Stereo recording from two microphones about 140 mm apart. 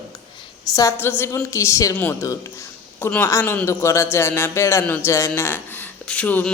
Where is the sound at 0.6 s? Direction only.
25° left (ahead or behind).